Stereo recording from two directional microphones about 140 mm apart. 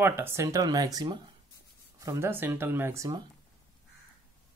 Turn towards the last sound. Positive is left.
turn(degrees=-20)  # may be behind; listen again after turning